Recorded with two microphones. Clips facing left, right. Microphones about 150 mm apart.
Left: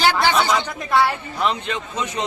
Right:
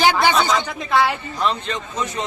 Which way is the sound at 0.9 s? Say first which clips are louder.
Even; 10° left (ahead or behind).